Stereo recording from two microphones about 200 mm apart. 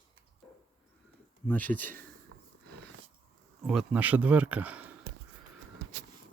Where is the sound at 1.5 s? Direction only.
10° left (ahead or behind).